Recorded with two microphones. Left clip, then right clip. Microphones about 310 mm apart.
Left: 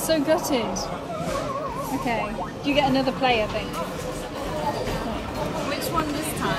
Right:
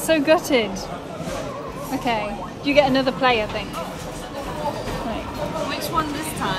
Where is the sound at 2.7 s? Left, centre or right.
Centre.